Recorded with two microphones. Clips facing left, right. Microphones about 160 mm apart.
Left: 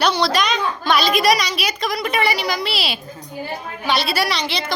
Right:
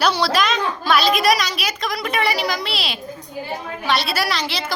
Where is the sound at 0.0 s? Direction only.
5° right (ahead or behind).